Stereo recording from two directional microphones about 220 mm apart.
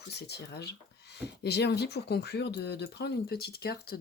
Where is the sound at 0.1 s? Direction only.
50° left (ahead or behind).